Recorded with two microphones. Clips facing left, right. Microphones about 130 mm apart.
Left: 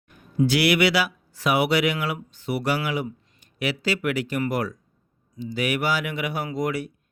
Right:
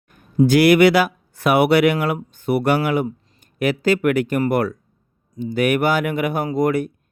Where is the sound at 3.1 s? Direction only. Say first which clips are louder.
Right 6 dB; 45° right (ahead or behind).